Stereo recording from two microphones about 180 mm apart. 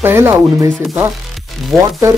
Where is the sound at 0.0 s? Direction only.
10° right (ahead or behind).